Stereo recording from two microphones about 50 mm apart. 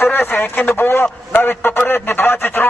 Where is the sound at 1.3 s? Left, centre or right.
Left.